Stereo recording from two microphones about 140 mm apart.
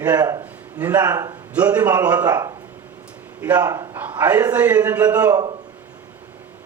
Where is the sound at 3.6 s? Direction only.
25° right (ahead or behind).